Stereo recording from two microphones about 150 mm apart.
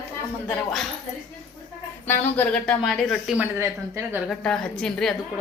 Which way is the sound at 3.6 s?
15° right (ahead or behind).